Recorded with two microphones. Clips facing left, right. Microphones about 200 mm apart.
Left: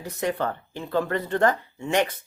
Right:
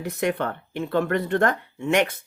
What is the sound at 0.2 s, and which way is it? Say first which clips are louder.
Speech: right 1 dB; 65° right (ahead or behind).